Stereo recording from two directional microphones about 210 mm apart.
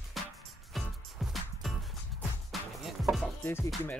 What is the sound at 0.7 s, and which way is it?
Music, centre (ahead or behind).